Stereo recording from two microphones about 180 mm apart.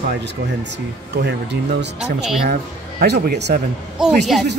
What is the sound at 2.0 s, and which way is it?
Speech, 5° right (ahead or behind).